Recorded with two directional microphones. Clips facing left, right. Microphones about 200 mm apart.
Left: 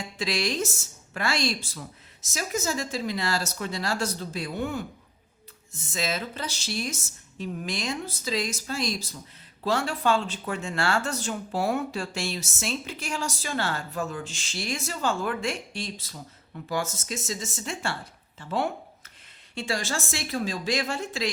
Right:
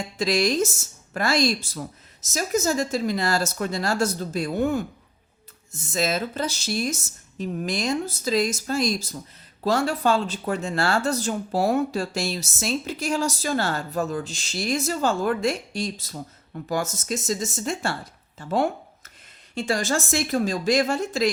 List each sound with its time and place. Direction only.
0.2 s speech: 40° right (ahead or behind)
5.9 s speech: 40° right (ahead or behind)